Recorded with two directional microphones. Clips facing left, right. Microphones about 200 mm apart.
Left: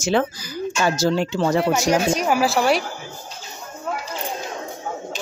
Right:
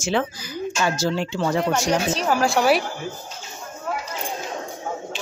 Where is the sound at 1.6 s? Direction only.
5° left (ahead or behind).